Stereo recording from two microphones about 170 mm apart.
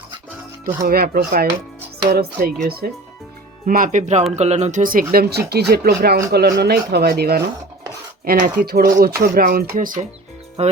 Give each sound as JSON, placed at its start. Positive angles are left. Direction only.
{"t": 0.6, "sound": "speech", "side_deg": -60}
{"t": 3.7, "sound": "speech", "side_deg": -55}
{"t": 5.1, "sound": "speech", "side_deg": -65}
{"t": 10.6, "sound": "music", "side_deg": -40}